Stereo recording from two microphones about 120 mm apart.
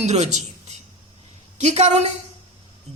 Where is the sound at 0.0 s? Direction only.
70° right (ahead or behind).